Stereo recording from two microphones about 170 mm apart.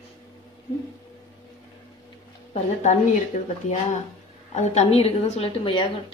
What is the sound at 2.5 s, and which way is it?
Speech, 40° left (ahead or behind).